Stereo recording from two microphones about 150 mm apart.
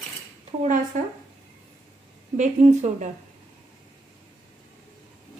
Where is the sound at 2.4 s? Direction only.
55° right (ahead or behind).